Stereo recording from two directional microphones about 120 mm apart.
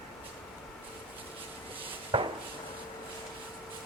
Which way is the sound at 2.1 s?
45° right (ahead or behind).